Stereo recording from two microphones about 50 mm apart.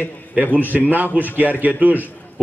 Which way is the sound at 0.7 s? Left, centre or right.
Right.